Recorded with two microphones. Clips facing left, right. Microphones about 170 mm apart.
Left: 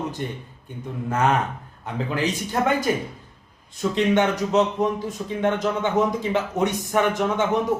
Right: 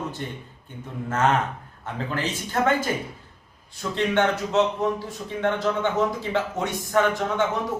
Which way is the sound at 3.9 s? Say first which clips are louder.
Left 2 dB; 15° left (ahead or behind).